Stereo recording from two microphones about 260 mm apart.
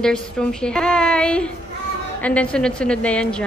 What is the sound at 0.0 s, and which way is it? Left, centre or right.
A woman's voice, centre.